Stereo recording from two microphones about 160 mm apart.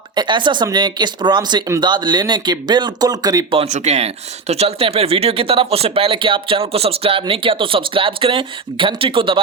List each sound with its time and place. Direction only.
0.2 s speech: 30° right (ahead or behind)
3.6 s speech: 45° right (ahead or behind)